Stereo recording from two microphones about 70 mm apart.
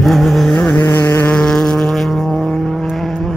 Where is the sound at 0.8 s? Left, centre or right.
Left.